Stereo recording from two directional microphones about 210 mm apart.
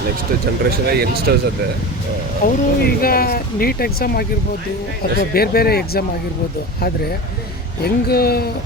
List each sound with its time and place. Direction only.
0.6 s speech: 45° right (ahead or behind)
2.4 s speech: 45° left (ahead or behind)
5.3 s speech: 45° left (ahead or behind)
7.9 s speech: 50° left (ahead or behind)